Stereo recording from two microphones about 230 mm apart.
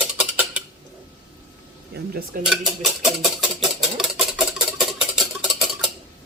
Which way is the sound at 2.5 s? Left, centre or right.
Centre.